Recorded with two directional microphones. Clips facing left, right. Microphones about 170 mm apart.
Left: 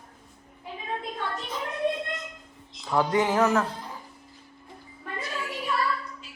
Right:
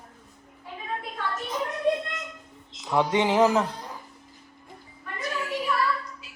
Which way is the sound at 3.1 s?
25° right (ahead or behind).